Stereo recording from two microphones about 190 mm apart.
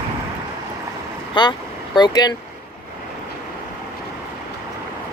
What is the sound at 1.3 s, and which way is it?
Speech, 25° left (ahead or behind).